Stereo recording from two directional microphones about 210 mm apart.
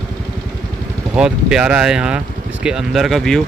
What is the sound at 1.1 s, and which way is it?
Speech, 5° right (ahead or behind).